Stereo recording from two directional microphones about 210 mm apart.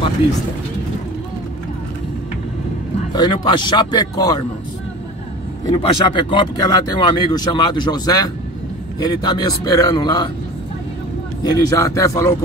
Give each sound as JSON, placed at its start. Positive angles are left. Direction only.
{"t": 3.1, "sound": "speech", "side_deg": 20}
{"t": 5.7, "sound": "speech", "side_deg": 25}
{"t": 11.4, "sound": "a man's voice", "side_deg": 15}